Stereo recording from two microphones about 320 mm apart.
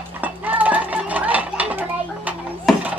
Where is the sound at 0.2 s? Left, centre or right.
Centre.